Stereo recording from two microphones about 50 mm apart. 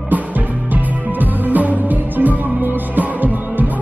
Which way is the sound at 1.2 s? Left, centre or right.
Right.